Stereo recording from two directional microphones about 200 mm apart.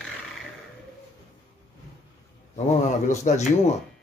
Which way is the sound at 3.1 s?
35° left (ahead or behind).